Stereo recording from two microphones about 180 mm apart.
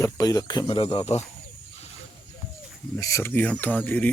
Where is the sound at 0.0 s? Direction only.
20° left (ahead or behind).